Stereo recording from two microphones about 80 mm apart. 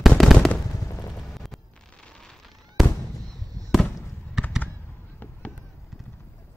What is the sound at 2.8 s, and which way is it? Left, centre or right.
Fireworks, centre.